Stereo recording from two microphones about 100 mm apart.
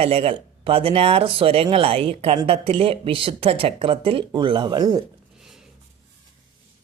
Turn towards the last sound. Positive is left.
turn(degrees=-45)  # may be behind; listen again after turning